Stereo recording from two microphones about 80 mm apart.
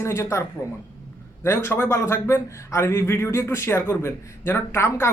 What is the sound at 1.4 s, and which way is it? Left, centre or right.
Speech, left.